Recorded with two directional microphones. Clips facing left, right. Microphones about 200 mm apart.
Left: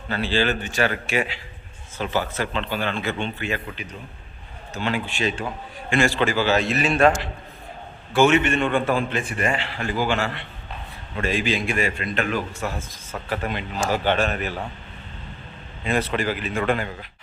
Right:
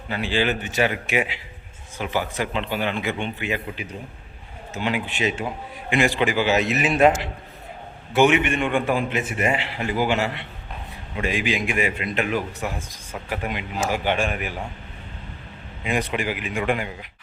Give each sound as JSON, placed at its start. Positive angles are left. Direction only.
{"t": 0.1, "sound": "a man's voice", "side_deg": -15}
{"t": 4.7, "sound": "a man's voice", "side_deg": -15}
{"t": 8.1, "sound": "a man's voice", "side_deg": -15}
{"t": 15.8, "sound": "a man's voice", "side_deg": -15}